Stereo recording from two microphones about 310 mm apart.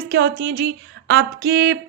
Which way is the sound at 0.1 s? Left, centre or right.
Right.